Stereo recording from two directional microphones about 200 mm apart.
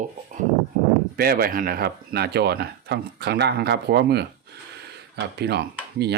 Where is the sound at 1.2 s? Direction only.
50° right (ahead or behind).